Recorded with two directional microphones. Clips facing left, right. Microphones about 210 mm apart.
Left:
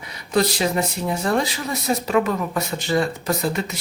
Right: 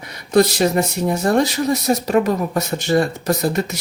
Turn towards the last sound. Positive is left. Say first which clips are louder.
# right 4 dB
turn(degrees=-40)  # may be behind; listen again after turning